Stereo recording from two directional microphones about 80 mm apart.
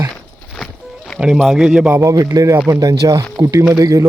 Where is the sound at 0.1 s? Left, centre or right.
Centre.